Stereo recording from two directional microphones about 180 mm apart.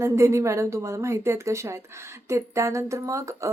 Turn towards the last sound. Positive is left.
turn(degrees=-15)  # may be behind; listen again after turning